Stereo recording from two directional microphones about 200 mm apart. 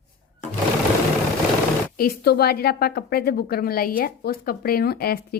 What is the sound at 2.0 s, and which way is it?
Speech, 50° left (ahead or behind).